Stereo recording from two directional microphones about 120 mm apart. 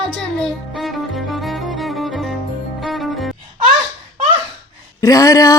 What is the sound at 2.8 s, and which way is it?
Cello, centre (ahead or behind).